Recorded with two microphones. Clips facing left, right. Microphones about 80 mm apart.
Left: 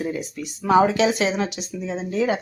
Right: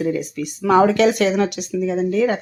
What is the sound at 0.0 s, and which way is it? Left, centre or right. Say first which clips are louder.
A woman's voice: right 6 dB; right.